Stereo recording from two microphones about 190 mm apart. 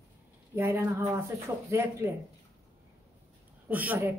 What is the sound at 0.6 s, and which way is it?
Speech, 10° right (ahead or behind).